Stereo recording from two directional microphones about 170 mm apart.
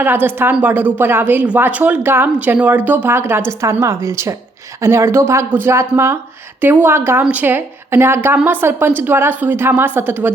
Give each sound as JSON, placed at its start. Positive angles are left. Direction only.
{"t": 0.0, "sound": "speech", "side_deg": -10}